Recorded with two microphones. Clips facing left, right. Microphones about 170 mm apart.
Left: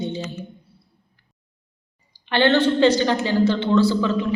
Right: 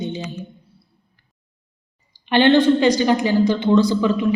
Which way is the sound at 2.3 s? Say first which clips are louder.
Right 4 dB; 15° right (ahead or behind).